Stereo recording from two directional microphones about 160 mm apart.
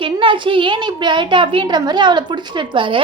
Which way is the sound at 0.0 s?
30° right (ahead or behind).